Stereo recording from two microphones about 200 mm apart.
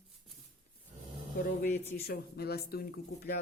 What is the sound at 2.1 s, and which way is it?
Speech, 50° left (ahead or behind).